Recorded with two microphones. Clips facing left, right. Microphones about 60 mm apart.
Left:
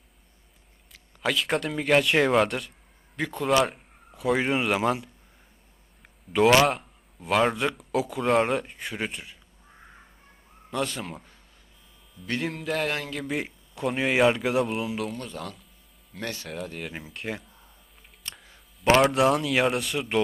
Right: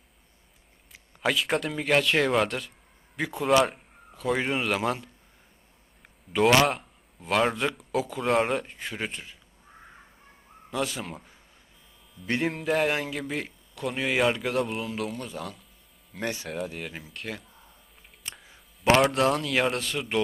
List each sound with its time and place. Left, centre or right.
1.2 s speech: centre
6.3 s speech: centre
10.7 s speech: centre
12.4 s a sound: centre
13.1 s speech: centre
16.1 s a sound: centre
16.5 s speech: centre
18.3 s speech: centre